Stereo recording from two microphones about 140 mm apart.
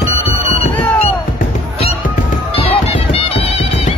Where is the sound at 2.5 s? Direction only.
40° left (ahead or behind).